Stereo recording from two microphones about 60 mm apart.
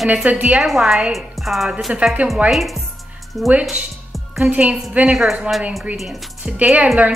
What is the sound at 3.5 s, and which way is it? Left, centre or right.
Speech, right.